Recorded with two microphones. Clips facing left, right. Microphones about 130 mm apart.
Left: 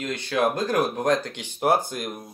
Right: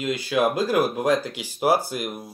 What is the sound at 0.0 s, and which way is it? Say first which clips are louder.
Speech: right 2 dB; 5° right (ahead or behind).